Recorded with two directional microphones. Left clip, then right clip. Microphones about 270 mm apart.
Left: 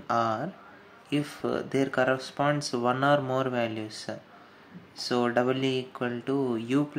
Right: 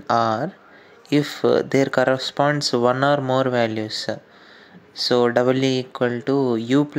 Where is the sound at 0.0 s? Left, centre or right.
Right.